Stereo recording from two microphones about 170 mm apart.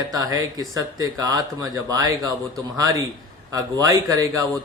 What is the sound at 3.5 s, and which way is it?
Speech, 20° right (ahead or behind).